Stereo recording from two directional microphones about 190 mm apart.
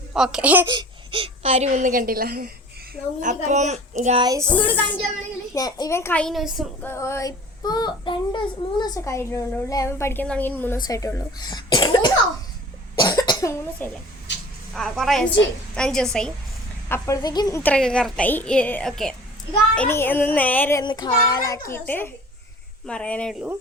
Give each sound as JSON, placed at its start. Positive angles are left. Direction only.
{"t": 0.1, "sound": "speech", "side_deg": -5}
{"t": 0.7, "sound": "speech", "side_deg": -25}
{"t": 3.2, "sound": "speech", "side_deg": -40}
{"t": 4.2, "sound": "speech", "side_deg": -20}
{"t": 4.4, "sound": "child singing", "side_deg": 10}
{"t": 5.5, "sound": "child singing", "side_deg": 20}
{"t": 6.8, "sound": "child singing", "side_deg": 15}
{"t": 10.8, "sound": "a child's voice", "side_deg": 15}
{"t": 13.0, "sound": "cough", "side_deg": 20}
{"t": 14.7, "sound": "speech", "side_deg": 0}
{"t": 16.9, "sound": "child singing", "side_deg": 20}
{"t": 20.8, "sound": "a child's voice", "side_deg": 20}
{"t": 21.7, "sound": "child singing", "side_deg": 10}
{"t": 22.9, "sound": "speech", "side_deg": 5}